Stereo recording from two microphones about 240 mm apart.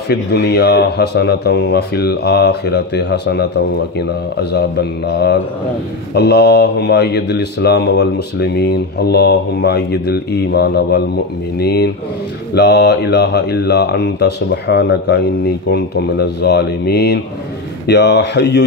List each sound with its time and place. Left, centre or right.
0.1 s a man's voice: left